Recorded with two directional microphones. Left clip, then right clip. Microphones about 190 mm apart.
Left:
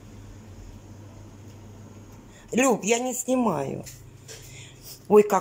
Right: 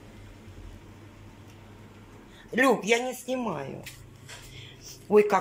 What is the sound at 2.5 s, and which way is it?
Speech, 10° left (ahead or behind).